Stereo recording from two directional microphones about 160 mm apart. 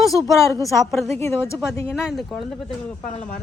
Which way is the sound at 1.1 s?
15° left (ahead or behind).